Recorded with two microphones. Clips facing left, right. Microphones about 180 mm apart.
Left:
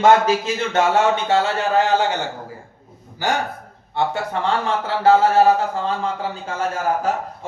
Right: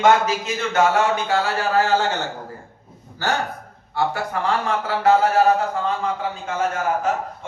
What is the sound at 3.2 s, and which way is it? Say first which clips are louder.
Speech: left 1 dB; 15° left (ahead or behind).